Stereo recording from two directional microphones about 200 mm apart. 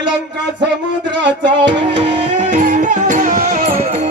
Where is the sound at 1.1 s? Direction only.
60° right (ahead or behind).